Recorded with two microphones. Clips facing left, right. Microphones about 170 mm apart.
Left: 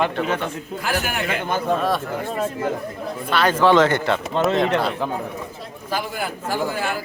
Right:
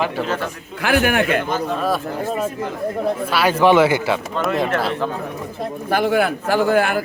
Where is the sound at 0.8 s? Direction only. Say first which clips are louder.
Right 8 dB; 65° right (ahead or behind).